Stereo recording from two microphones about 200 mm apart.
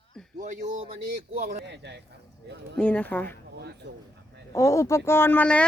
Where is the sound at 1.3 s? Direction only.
35° right (ahead or behind).